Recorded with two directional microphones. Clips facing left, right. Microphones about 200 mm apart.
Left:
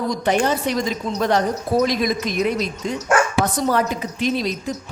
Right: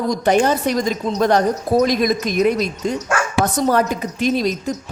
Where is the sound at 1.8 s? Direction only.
45° right (ahead or behind).